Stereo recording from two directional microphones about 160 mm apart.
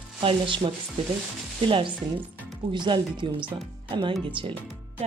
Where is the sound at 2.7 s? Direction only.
30° right (ahead or behind).